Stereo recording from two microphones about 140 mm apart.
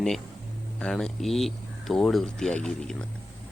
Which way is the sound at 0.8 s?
5° left (ahead or behind).